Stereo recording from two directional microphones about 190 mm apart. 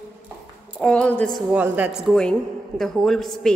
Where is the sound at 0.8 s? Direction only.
5° left (ahead or behind).